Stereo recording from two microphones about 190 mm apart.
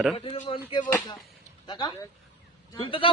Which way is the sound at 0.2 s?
30° left (ahead or behind).